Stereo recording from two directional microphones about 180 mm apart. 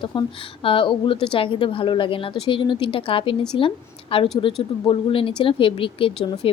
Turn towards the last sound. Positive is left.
turn(degrees=30)  # may be behind; listen again after turning